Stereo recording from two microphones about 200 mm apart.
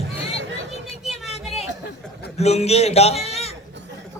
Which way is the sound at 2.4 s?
30° left (ahead or behind).